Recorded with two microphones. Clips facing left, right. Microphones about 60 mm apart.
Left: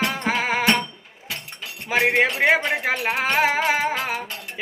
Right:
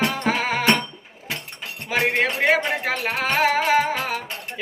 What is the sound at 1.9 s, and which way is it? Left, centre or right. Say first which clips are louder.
Speech: left 2 dB; centre.